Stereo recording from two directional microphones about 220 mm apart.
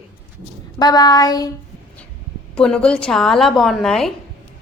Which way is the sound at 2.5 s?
5° left (ahead or behind).